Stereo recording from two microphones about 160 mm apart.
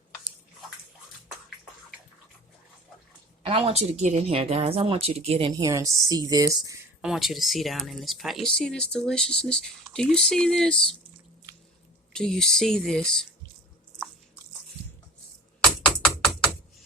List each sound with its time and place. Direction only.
3.4 s speech: 40° right (ahead or behind); by 6.7 s 20° right (ahead or behind)
7.0 s speech: centre (ahead or behind)
12.1 s speech: 5° left (ahead or behind)